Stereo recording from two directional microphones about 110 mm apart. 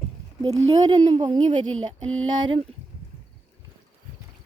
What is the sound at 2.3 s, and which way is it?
Speech, 45° right (ahead or behind).